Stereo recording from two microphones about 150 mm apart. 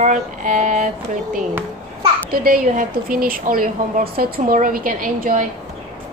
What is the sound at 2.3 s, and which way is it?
A woman's voice, 75° right (ahead or behind).